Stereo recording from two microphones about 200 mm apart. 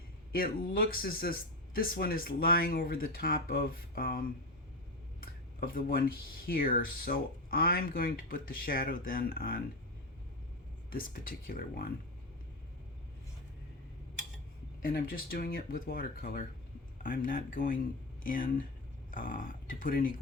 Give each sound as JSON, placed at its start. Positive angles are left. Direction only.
{"t": 0.3, "sound": "speech", "side_deg": 45}
{"t": 5.5, "sound": "speech", "side_deg": 45}
{"t": 10.9, "sound": "speech", "side_deg": 45}
{"t": 14.8, "sound": "speech", "side_deg": 50}